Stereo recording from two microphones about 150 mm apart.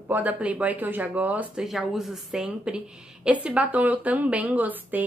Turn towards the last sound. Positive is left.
turn(degrees=-10)  # may be behind; listen again after turning